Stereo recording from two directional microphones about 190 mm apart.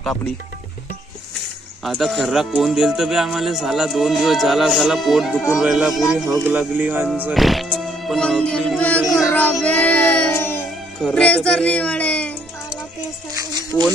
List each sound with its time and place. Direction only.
1.9 s speech: centre (ahead or behind)
9.0 s music: 10° left (ahead or behind)
11.0 s speech: 5° left (ahead or behind)
13.3 s music: 20° right (ahead or behind)